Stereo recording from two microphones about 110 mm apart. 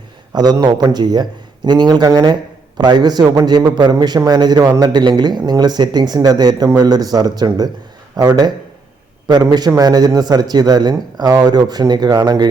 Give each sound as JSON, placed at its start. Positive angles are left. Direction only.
{"t": 0.3, "sound": "speech", "side_deg": -40}